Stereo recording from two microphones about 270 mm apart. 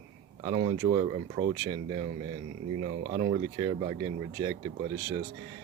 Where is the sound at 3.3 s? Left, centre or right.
Centre.